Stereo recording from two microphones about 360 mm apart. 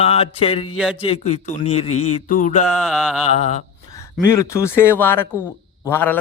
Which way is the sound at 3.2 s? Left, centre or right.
Centre.